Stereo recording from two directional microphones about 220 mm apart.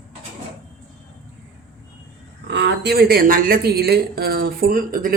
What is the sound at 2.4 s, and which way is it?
Speech, 50° right (ahead or behind).